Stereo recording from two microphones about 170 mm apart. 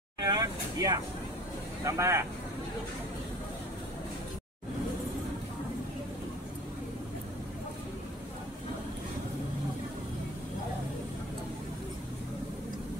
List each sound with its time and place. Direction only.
0.2 s vehicle: 20° right (ahead or behind)
1.9 s speech: 15° right (ahead or behind)